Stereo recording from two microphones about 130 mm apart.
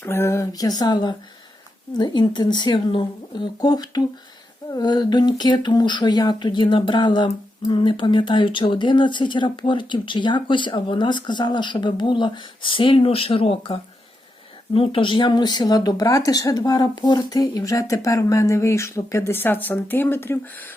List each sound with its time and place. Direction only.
0.0 s speech: 20° left (ahead or behind)